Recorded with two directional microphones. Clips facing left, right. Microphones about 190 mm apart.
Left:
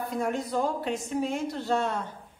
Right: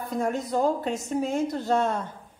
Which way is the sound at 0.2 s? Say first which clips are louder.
Right 4 dB; 45° right (ahead or behind).